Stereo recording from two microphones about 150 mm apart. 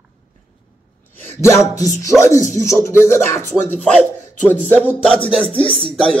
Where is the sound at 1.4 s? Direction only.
20° left (ahead or behind).